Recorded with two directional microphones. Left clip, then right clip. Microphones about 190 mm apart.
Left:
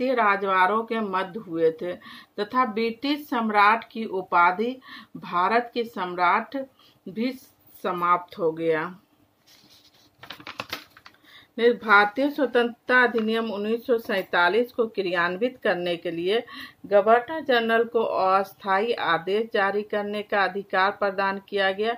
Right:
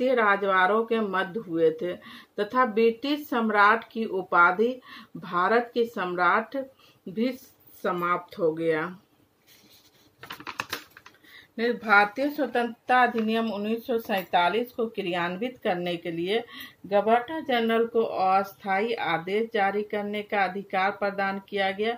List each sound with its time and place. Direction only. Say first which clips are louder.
0.0 s speech: even; 45° left (ahead or behind)
7.8 s speech: left 4 dB; 55° left (ahead or behind)
11.3 s speech: left 7 dB; 55° left (ahead or behind)